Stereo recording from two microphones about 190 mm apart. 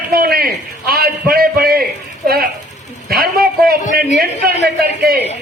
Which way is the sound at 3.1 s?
55° right (ahead or behind).